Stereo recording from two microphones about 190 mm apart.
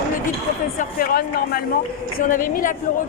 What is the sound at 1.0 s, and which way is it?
A woman's voice, 55° left (ahead or behind).